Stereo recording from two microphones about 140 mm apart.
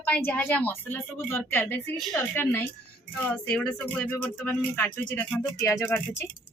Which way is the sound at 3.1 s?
10° left (ahead or behind).